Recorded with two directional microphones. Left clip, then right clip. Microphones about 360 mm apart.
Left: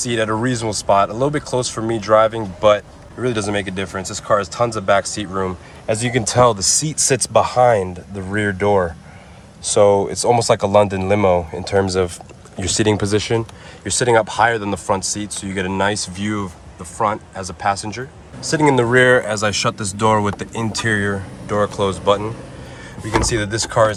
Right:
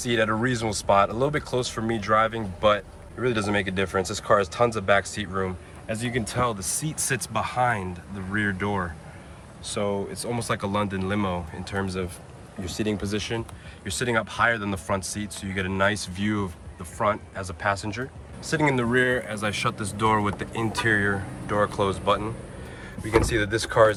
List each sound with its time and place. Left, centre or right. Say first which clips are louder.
0.0 s speech: left 4 dB; centre
23.3 s speech: left 4 dB; centre